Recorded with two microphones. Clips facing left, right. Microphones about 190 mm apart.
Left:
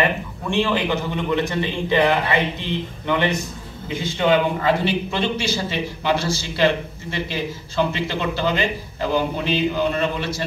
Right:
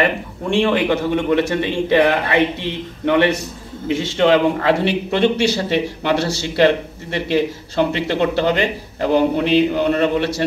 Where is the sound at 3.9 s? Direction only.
85° right.